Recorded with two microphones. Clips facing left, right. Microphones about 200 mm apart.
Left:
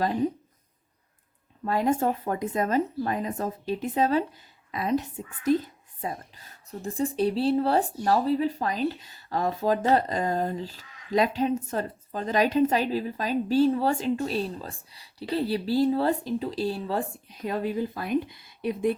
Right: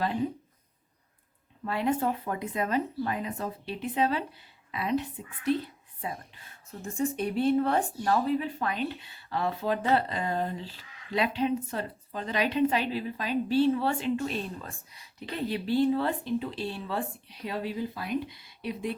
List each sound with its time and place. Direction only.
1.6 s a woman's voice: 40° left (ahead or behind)